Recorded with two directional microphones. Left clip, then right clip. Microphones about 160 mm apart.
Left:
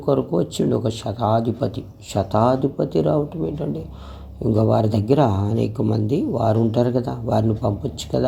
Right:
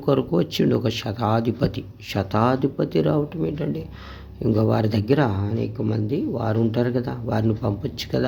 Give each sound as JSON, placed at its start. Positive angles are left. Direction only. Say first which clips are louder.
{"t": 0.0, "sound": "speech", "louder": "left 1 dB", "side_deg": -5}
{"t": 5.3, "sound": "speech", "louder": "left 4 dB", "side_deg": 20}